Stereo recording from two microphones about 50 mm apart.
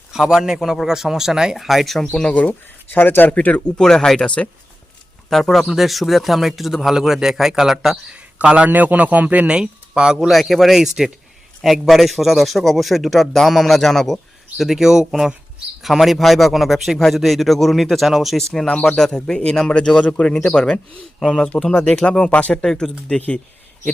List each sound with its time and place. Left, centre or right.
0.1 s a man's voice: centre
2.3 s speech: left
3.8 s a man's voice: centre
5.3 s a man's voice: centre
8.1 s a man's voice: right
9.6 s speech: centre
10.2 s a man's voice: centre
14.6 s a man's voice: centre
18.3 s a man's voice: centre
22.3 s speech: left
22.6 s a man's voice: centre